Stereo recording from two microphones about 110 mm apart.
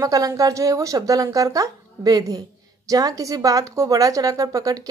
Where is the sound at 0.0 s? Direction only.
30° right (ahead or behind).